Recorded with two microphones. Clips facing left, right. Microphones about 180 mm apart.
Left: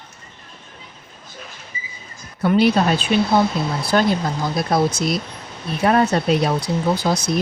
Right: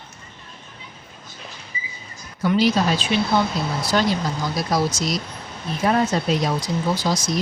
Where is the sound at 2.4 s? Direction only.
60° left (ahead or behind).